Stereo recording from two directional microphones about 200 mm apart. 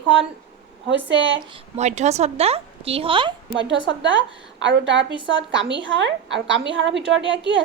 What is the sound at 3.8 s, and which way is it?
A woman's voice, 65° right (ahead or behind).